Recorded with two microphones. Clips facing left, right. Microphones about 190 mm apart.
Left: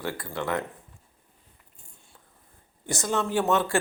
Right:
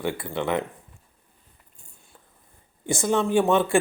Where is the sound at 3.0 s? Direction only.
20° right (ahead or behind).